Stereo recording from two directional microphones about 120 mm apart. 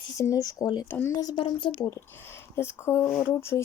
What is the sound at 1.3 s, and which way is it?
Speech, 45° left (ahead or behind).